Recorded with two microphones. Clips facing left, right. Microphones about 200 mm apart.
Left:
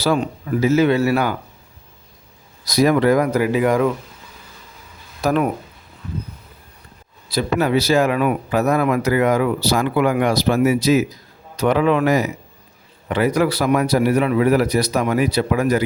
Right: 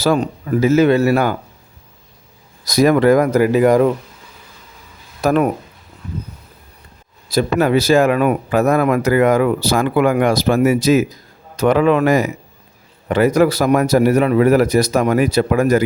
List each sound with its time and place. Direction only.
0.0 s speech: 45° right (ahead or behind)
2.6 s speech: 50° right (ahead or behind)
5.2 s speech: 50° right (ahead or behind)
7.3 s speech: 45° right (ahead or behind)